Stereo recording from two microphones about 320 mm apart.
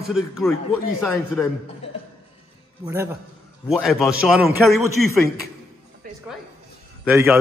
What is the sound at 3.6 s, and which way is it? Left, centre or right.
A man's voice, centre.